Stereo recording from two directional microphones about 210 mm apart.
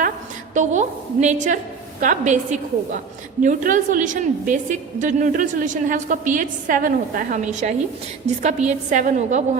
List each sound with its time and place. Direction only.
0.5 s a woman's voice: 35° right (ahead or behind)